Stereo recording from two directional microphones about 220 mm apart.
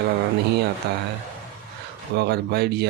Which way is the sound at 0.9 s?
50° right (ahead or behind).